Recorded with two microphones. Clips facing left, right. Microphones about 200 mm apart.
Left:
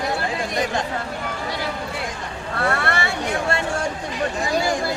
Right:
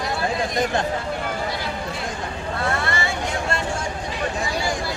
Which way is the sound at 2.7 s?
65° left (ahead or behind).